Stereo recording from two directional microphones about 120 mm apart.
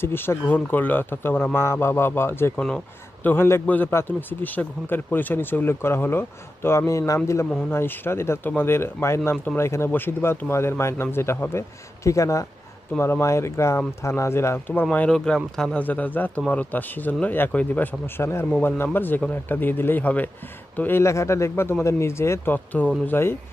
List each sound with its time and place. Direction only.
0.0 s speech: 20° left (ahead or behind)
2.5 s a man's voice: 5° left (ahead or behind)
3.3 s a man's voice: 20° left (ahead or behind)
14.7 s a man's voice: 10° left (ahead or behind)